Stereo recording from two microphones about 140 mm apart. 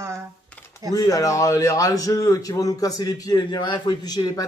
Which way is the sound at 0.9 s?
25° left (ahead or behind).